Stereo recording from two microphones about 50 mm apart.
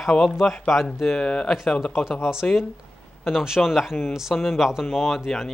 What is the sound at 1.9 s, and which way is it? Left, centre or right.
Speech, centre.